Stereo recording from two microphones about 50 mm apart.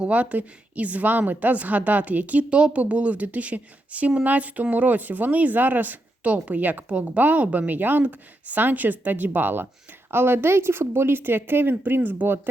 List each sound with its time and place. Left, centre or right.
0.0 s a woman's voice: right
6.8 s a woman's voice: right
10.1 s a woman's voice: right